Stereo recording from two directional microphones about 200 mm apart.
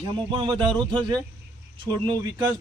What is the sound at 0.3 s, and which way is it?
A man's voice, 25° right (ahead or behind).